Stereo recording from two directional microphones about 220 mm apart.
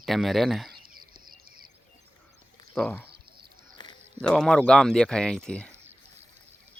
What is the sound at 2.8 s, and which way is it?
Speech, 5° left (ahead or behind).